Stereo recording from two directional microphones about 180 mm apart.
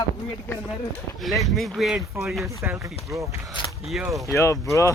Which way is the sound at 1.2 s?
Centre (ahead or behind).